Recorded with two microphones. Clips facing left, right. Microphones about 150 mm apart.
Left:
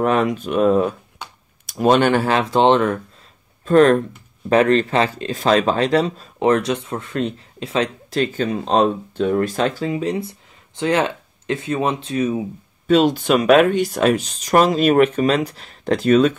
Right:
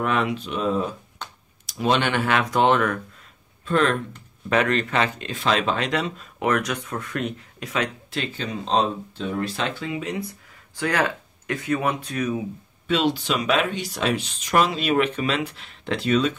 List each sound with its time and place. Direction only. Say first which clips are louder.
0.0 s speech: left 6 dB; 40° left (ahead or behind); by 0.9 s 60° left (ahead or behind)
1.2 s a sound: left 2 dB; 10° left (ahead or behind)
1.7 s speech: left 7 dB; 45° left (ahead or behind); by 3.0 s 30° left (ahead or behind)
3.6 s speech: left 9 dB; 40° left (ahead or behind); by 12.4 s 25° left (ahead or behind)
12.8 s speech: left 7 dB; 45° left (ahead or behind)